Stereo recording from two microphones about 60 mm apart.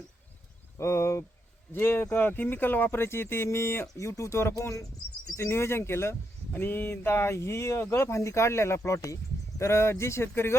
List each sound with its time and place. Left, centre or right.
0.8 s speech: left
1.7 s speech: left
3.9 s speech: left
5.4 s speech: left
6.5 s speech: left